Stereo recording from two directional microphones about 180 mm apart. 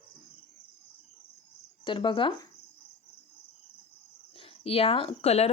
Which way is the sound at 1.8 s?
25° left (ahead or behind).